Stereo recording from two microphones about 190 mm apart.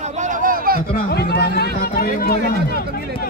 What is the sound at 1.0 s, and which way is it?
Speech, 55° left (ahead or behind).